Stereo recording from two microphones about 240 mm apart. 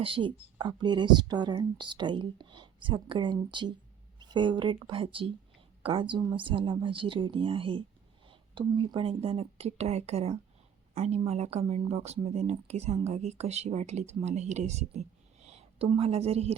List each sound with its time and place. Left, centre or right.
0.0 s speech: right